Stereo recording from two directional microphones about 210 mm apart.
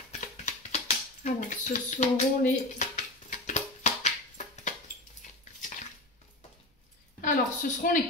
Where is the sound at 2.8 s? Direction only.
35° left (ahead or behind).